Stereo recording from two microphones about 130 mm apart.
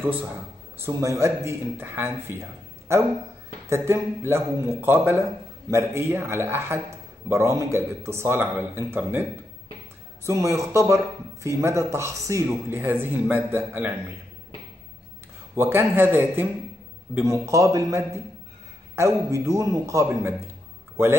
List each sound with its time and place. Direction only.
0.0 s a man's voice: 15° right (ahead or behind)
10.2 s a man's voice: 25° right (ahead or behind)
15.5 s a man's voice: 20° right (ahead or behind)